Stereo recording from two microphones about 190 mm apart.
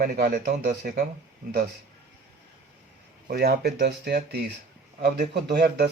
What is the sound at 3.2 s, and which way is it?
Speech, 55° right (ahead or behind).